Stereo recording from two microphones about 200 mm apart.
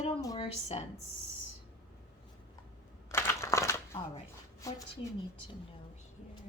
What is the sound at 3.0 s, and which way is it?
Crumpling, 15° left (ahead or behind).